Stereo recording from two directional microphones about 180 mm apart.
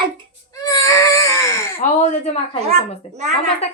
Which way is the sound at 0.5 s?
20° left (ahead or behind).